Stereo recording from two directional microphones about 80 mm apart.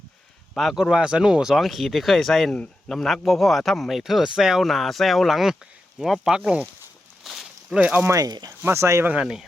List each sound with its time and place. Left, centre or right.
0.5 s speech: centre
7.3 s walk: centre
7.8 s speech: centre
8.0 s speech: right
9.2 s speech: centre